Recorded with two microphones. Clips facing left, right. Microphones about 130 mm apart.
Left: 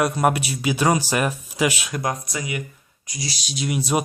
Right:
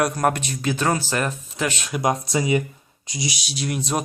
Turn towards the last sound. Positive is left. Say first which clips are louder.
# left 2 dB
turn(degrees=5)  # may be behind; listen again after turning